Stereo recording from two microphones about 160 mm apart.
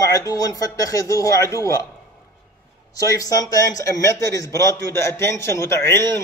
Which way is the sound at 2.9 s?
20° left (ahead or behind).